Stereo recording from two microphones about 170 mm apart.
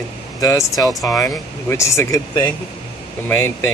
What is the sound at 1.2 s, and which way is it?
Speech, 20° left (ahead or behind).